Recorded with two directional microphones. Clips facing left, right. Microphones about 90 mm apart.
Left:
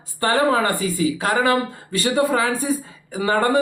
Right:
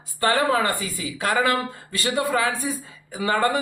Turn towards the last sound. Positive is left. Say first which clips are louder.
# left 4 dB
turn(degrees=35)  # may be behind; listen again after turning